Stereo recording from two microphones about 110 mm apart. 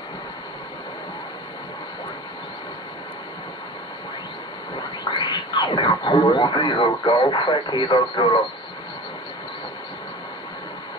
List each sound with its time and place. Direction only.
4.7 s radio: 45° left (ahead or behind)
7.1 s speech: 50° left (ahead or behind)